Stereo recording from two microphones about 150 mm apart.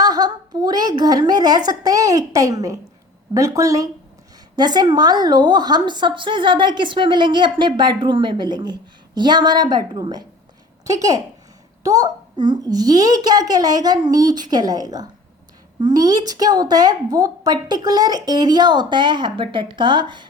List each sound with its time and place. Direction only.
0.0 s a woman's voice: 25° right (ahead or behind)